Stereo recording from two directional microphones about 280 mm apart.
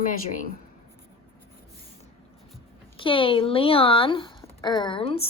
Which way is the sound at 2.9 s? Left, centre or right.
Centre.